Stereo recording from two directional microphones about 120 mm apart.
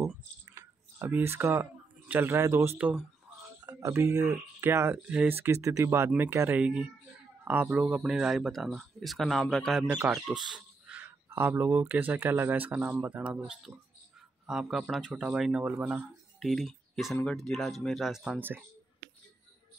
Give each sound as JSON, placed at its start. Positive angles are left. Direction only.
{"t": 0.5, "sound": "speech", "side_deg": -20}
{"t": 3.6, "sound": "speech", "side_deg": -25}
{"t": 4.9, "sound": "speech", "side_deg": -10}
{"t": 9.8, "sound": "speech", "side_deg": -15}
{"t": 10.1, "sound": "a sound", "side_deg": -5}
{"t": 11.8, "sound": "speech", "side_deg": -15}
{"t": 16.3, "sound": "speech", "side_deg": 0}
{"t": 18.4, "sound": "speech", "side_deg": -15}